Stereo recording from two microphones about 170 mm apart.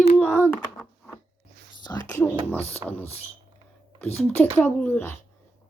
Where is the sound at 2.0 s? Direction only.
15° left (ahead or behind).